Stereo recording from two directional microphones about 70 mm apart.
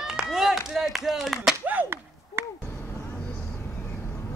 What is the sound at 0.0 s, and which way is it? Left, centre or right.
Clapping, centre.